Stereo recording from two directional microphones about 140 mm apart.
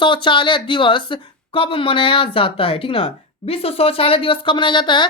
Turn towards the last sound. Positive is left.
turn(degrees=35)  # may be behind; listen again after turning